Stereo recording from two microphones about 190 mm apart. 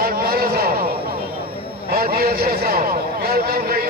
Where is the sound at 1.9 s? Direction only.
55° right (ahead or behind).